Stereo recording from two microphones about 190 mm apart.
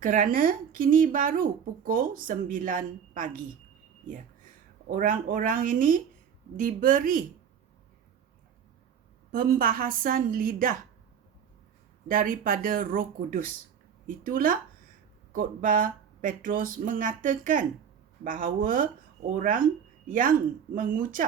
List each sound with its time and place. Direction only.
0.0 s a woman's voice: 45° right (ahead or behind)
4.9 s a woman's voice: 45° right (ahead or behind)
9.3 s a woman's voice: 50° right (ahead or behind)
12.0 s a woman's voice: 45° right (ahead or behind)